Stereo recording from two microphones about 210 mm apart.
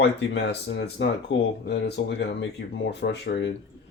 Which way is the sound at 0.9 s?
55° left (ahead or behind).